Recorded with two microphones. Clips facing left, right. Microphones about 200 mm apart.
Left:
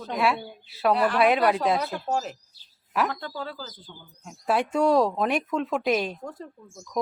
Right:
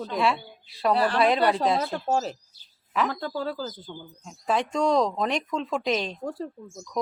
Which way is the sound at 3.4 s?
40° right (ahead or behind).